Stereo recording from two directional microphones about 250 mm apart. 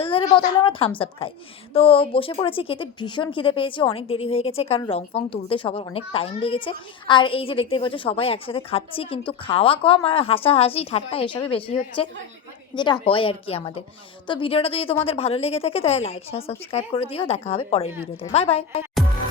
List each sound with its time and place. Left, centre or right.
0.0 s a woman's voice: left